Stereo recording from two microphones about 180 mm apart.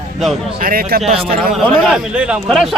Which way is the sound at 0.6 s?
55° right (ahead or behind).